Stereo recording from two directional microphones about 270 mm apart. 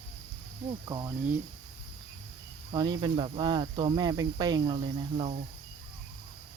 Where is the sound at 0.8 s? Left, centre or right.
Centre.